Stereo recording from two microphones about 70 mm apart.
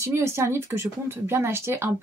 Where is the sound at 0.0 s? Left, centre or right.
Right.